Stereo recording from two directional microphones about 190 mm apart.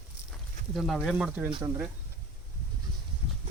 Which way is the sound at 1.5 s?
25° right (ahead or behind).